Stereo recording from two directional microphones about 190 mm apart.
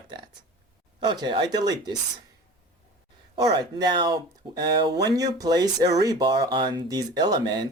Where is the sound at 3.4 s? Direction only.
20° right (ahead or behind).